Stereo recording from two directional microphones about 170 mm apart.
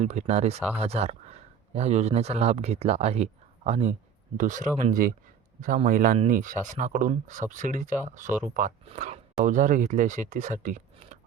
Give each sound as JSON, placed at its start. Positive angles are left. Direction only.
{"t": 0.0, "sound": "speech", "side_deg": -40}